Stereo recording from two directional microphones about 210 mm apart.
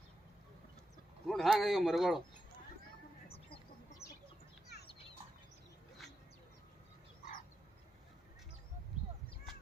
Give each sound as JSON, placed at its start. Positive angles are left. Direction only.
{"t": 1.3, "sound": "a man's voice", "side_deg": 0}
{"t": 4.0, "sound": "chicken", "side_deg": 30}